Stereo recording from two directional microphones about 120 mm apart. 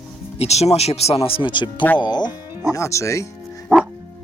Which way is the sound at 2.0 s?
35° left (ahead or behind).